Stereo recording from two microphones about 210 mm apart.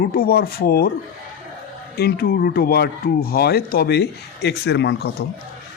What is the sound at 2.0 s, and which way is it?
Speech, 45° left (ahead or behind).